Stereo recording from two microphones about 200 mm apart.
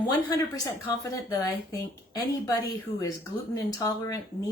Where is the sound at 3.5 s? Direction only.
15° left (ahead or behind).